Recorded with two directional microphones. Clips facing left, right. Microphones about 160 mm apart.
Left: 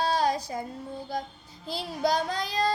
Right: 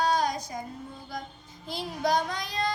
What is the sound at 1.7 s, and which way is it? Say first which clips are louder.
Child singing: even; 35° left (ahead or behind).